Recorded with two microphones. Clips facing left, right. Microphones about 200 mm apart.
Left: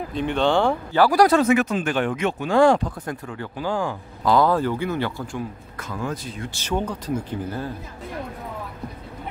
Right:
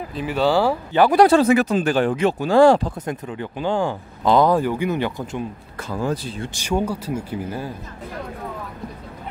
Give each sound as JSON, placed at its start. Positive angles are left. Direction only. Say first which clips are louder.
{"t": 0.1, "sound": "speech", "louder": "right 1 dB", "side_deg": -5}
{"t": 0.9, "sound": "speech", "louder": "right 3 dB", "side_deg": -20}
{"t": 3.1, "sound": "speech", "louder": "right 3 dB", "side_deg": -20}
{"t": 5.9, "sound": "speech", "louder": "right 5 dB", "side_deg": -30}
{"t": 6.5, "sound": "speech", "louder": "right 3 dB", "side_deg": -10}